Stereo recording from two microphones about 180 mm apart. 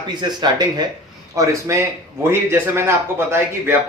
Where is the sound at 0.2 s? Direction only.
25° right (ahead or behind).